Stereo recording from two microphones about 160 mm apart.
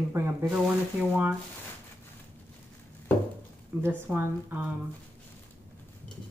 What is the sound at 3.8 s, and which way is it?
Speech, 10° right (ahead or behind).